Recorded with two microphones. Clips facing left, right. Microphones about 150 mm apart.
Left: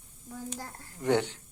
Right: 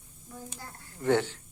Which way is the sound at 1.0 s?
15° left (ahead or behind).